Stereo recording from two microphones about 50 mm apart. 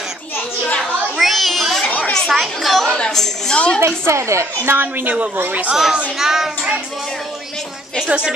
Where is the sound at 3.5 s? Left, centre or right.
Left.